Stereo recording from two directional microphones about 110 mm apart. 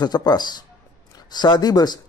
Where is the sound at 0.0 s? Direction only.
40° left (ahead or behind).